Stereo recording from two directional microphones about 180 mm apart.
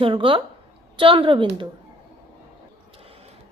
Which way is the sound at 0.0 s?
30° right (ahead or behind).